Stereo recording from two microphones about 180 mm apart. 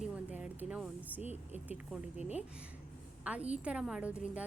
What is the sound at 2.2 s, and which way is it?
Speech, 40° left (ahead or behind).